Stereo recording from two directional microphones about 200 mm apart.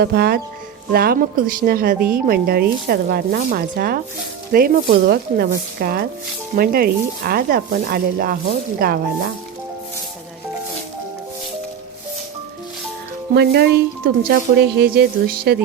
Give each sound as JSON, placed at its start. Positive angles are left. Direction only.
{"t": 0.0, "sound": "speech", "side_deg": -55}
{"t": 13.3, "sound": "speech", "side_deg": -55}